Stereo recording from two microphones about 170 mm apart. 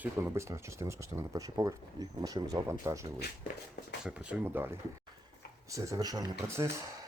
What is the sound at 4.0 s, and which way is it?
Speech, 5° right (ahead or behind).